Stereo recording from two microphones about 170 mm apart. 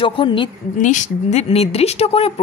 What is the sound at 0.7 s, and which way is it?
A woman's voice, 45° left (ahead or behind).